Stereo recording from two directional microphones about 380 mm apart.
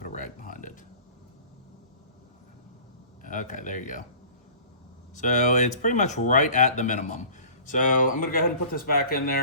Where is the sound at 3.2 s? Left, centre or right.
Centre.